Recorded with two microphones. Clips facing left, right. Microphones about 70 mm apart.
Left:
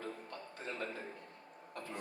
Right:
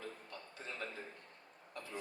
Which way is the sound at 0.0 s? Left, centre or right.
Left.